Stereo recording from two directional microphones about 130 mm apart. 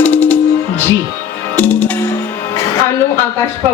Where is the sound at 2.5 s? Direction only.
25° left (ahead or behind).